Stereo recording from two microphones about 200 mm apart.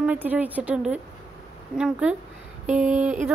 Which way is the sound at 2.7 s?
35° right (ahead or behind).